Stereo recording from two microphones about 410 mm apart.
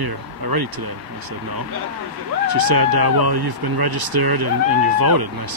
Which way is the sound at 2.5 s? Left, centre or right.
Right.